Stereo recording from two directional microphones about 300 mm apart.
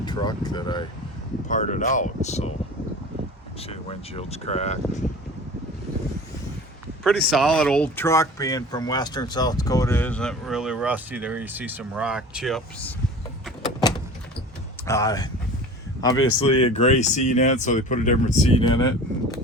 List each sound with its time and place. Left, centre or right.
0.0 s speech: centre
3.6 s speech: centre
7.0 s speech: centre
14.8 s speech: centre
16.1 s speech: left
16.7 s speech: left